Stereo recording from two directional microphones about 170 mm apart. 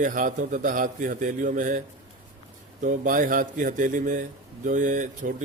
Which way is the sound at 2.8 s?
50° right (ahead or behind).